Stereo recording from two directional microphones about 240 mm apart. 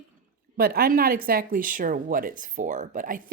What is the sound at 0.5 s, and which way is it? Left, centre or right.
Speech, right.